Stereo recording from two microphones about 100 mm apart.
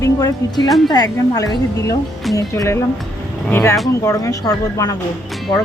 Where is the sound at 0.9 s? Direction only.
40° left (ahead or behind).